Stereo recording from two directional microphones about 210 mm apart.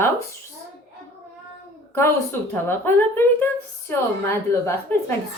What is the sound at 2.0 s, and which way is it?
Speech, 10° left (ahead or behind).